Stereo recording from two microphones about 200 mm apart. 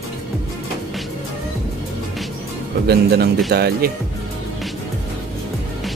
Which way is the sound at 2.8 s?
55° right (ahead or behind).